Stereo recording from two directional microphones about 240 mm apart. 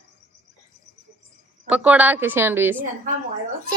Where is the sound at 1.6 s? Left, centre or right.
Centre.